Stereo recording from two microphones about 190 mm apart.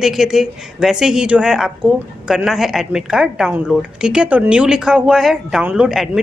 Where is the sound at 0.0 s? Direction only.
Centre (ahead or behind).